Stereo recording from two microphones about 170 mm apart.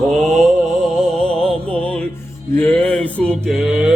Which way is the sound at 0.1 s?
Centre (ahead or behind).